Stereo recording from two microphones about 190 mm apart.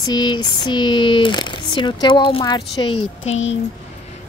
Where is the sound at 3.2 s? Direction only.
85° left.